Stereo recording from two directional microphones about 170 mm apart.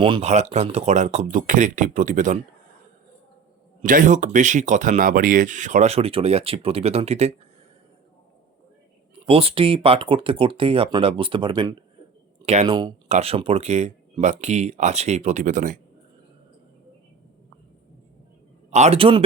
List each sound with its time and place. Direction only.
0.0 s speech: 35° right (ahead or behind)
3.8 s speech: 50° right (ahead or behind)
9.2 s speech: 35° right (ahead or behind); by 15.8 s 50° right (ahead or behind)
18.7 s speech: 40° right (ahead or behind)